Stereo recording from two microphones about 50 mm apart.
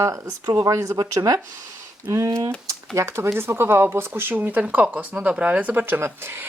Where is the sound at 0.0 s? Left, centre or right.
Right.